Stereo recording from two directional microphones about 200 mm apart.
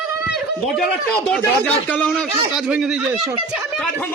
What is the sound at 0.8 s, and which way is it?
A man's voice, centre (ahead or behind).